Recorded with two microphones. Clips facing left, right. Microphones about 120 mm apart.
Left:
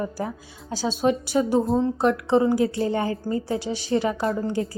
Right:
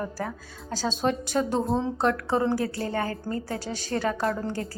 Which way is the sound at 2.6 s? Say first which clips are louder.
Left 5 dB; 20° left (ahead or behind).